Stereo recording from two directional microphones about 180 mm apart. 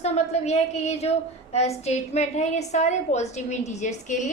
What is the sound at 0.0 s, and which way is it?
A woman's voice, 35° left (ahead or behind).